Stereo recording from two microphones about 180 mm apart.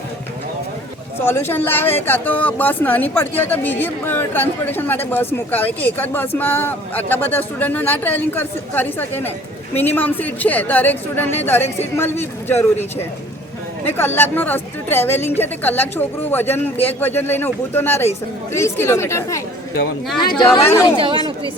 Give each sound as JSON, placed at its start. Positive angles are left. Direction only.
{"t": 1.2, "sound": "speech", "side_deg": 15}
{"t": 13.8, "sound": "speech", "side_deg": 10}
{"t": 20.7, "sound": "speech", "side_deg": 20}